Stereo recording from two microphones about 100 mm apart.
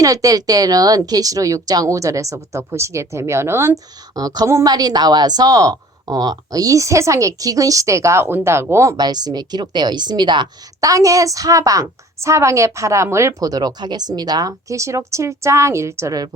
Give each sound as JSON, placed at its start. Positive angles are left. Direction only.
{"t": 0.0, "sound": "a woman's voice", "side_deg": -35}
{"t": 4.1, "sound": "a woman's voice", "side_deg": -40}
{"t": 4.4, "sound": "a woman's voice", "side_deg": -30}
{"t": 4.7, "sound": "a woman's voice", "side_deg": -45}
{"t": 9.0, "sound": "a woman's voice", "side_deg": -45}
{"t": 10.8, "sound": "a woman's voice", "side_deg": -35}